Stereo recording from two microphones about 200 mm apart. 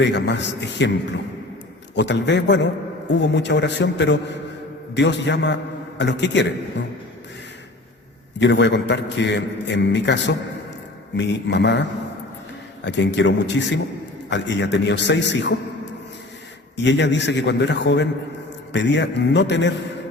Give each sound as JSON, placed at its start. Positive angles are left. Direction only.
{"t": 0.0, "sound": "a man's voice", "side_deg": 60}
{"t": 8.4, "sound": "a man's voice", "side_deg": 60}
{"t": 16.7, "sound": "a man's voice", "side_deg": 60}